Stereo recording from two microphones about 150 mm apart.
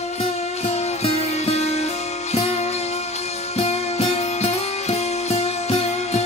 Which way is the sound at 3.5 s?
45° left (ahead or behind).